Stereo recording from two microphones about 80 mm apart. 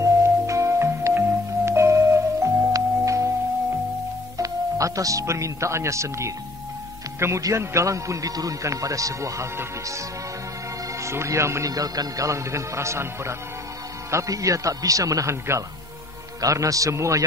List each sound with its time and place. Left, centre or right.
0.0 s music: right
4.4 s a man's voice: right
11.0 s speech: right
11.7 s a man's voice: right